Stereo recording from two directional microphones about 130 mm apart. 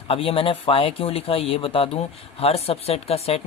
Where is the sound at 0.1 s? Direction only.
45° left (ahead or behind).